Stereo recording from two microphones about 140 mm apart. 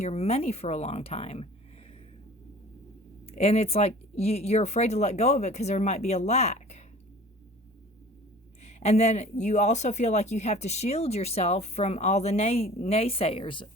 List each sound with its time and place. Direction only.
0.0 s speech: 45° left (ahead or behind)
3.2 s speech: 45° left (ahead or behind)
8.6 s speech: 50° left (ahead or behind)